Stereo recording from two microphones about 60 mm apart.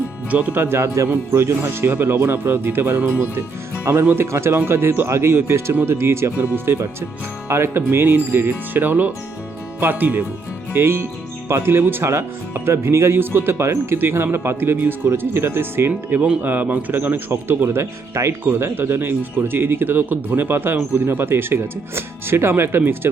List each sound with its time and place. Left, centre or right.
0.3 s speech: right
0.6 s speech: right
4.1 s speech: right
7.4 s speech: right
10.8 s speech: right
15.9 s speech: right
18.1 s speech: right
18.6 s speech: right